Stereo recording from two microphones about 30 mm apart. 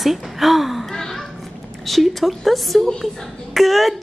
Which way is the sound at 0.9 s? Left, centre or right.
Centre.